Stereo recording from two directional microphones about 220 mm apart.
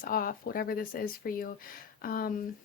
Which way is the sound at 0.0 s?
40° left (ahead or behind).